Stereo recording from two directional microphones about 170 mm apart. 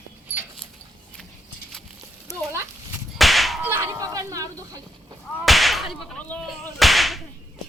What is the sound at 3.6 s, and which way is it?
Livestock, 15° right (ahead or behind).